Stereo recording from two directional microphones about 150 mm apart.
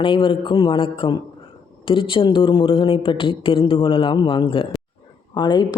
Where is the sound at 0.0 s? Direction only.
35° left (ahead or behind).